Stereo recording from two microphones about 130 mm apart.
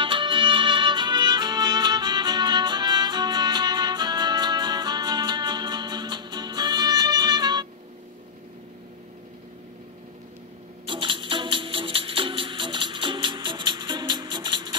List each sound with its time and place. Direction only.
0.0 s music: 40° right (ahead or behind)
10.9 s music: 40° right (ahead or behind)